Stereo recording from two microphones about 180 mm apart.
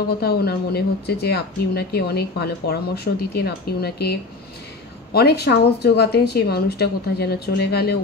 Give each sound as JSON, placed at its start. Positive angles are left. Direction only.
{"t": 0.2, "sound": "speech", "side_deg": 65}